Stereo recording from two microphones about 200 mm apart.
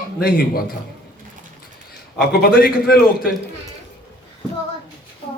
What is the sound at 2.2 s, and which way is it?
Speech, 50° left (ahead or behind).